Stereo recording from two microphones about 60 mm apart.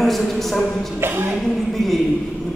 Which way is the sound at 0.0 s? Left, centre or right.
Centre.